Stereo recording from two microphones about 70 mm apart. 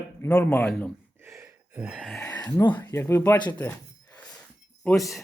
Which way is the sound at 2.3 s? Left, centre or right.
Left.